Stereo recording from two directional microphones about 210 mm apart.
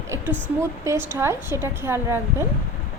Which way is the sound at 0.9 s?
10° right (ahead or behind).